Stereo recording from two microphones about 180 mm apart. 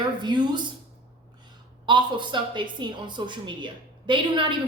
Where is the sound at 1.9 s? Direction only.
25° right (ahead or behind).